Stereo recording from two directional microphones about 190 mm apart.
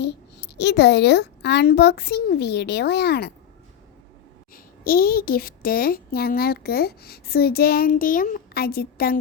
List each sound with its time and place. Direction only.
0.0 s a woman's voice: 65° left (ahead or behind)
4.5 s a child's voice: 50° left (ahead or behind)